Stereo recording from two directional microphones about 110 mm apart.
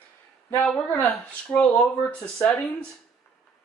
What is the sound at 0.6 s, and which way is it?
A man's voice, 10° left (ahead or behind).